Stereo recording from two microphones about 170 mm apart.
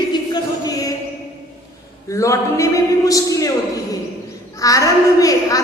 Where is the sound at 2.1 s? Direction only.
20° left (ahead or behind).